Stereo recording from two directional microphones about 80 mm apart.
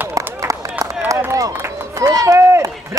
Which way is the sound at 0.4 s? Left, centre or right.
Right.